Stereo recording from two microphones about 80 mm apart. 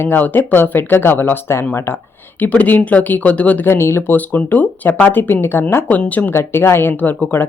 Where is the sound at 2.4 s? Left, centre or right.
Centre.